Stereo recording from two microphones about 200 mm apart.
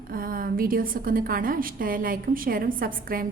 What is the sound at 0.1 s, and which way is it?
A woman's voice, 45° right (ahead or behind).